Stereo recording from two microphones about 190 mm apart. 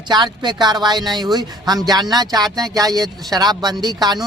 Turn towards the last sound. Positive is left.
turn(degrees=-20)  # may be behind; listen again after turning